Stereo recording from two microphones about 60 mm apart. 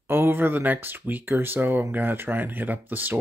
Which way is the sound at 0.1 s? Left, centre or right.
Right.